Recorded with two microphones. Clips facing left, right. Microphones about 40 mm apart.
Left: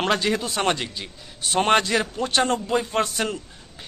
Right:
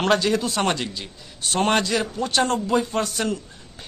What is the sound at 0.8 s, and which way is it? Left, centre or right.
Speech, centre.